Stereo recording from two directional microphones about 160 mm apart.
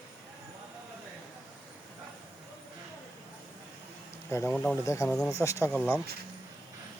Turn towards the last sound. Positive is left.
turn(degrees=5)  # may be behind; listen again after turning